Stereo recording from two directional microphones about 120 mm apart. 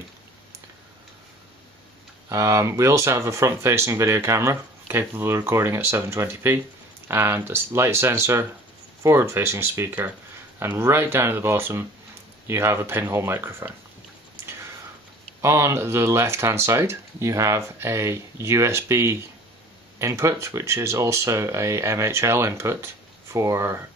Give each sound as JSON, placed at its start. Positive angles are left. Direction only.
{"t": 2.2, "sound": "speech", "side_deg": -25}
{"t": 15.4, "sound": "speech", "side_deg": -25}